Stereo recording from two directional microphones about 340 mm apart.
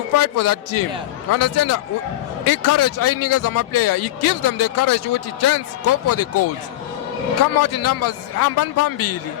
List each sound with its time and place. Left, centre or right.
0.2 s speech: left